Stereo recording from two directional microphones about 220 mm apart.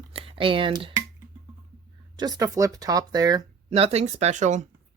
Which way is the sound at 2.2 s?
15° right (ahead or behind).